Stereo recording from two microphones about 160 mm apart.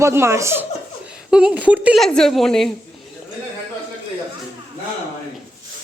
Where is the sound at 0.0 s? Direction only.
15° right (ahead or behind).